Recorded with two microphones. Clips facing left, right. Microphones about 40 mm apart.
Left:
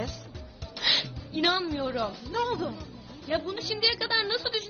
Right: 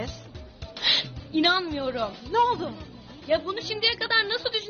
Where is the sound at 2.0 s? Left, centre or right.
Right.